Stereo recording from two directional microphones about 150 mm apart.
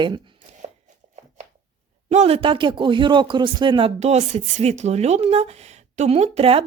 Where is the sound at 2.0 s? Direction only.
45° right (ahead or behind).